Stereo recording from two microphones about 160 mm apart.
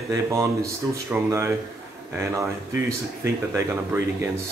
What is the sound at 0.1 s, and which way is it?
Speech, 20° right (ahead or behind).